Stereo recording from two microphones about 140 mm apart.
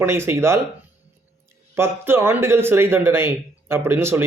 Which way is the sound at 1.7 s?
15° right (ahead or behind).